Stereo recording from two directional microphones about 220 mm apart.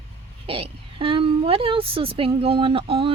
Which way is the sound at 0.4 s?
25° right (ahead or behind).